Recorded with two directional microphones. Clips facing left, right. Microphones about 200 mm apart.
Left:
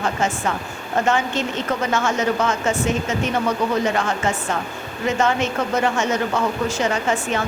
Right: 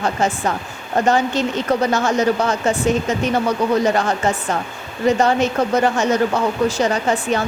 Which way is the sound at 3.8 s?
35° right (ahead or behind).